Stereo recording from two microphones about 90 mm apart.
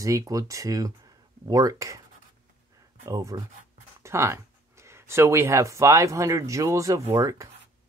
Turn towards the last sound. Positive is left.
turn(degrees=-40)  # may be behind; listen again after turning